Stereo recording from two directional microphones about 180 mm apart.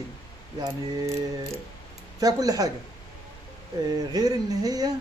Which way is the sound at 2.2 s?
20° right (ahead or behind).